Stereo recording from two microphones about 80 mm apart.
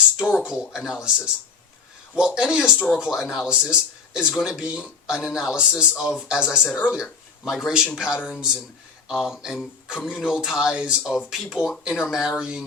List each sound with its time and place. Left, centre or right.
0.4 s speech: centre
2.7 s speech: centre
3.2 s speech: centre